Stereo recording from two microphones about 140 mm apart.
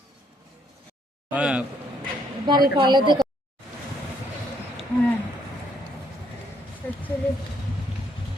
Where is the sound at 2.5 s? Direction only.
30° right (ahead or behind).